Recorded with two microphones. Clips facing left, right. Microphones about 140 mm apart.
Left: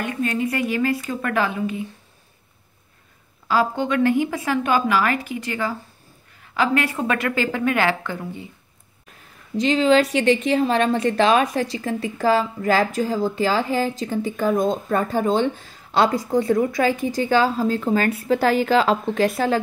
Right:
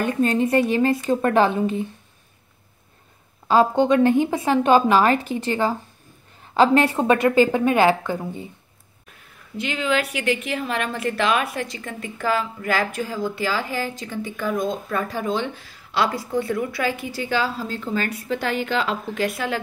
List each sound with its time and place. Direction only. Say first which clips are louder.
0.0 s a woman's voice: right 4 dB; 35° right (ahead or behind)
3.4 s a woman's voice: right 4 dB; 25° right (ahead or behind)
9.6 s a woman's voice: left 7 dB; 35° left (ahead or behind)